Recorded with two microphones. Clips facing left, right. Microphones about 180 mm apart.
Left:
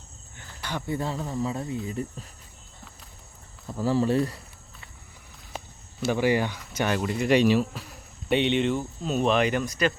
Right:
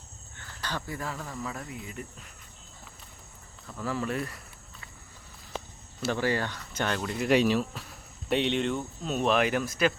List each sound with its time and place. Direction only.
0.3 s cricket: 15° left (ahead or behind)
0.9 s speech: 30° left (ahead or behind)
3.7 s speech: 30° left (ahead or behind)
6.1 s speech: 15° left (ahead or behind); by 9.9 s centre (ahead or behind)